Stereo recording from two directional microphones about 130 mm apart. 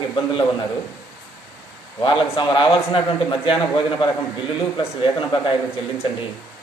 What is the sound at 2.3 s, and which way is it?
A man's voice, 40° left (ahead or behind).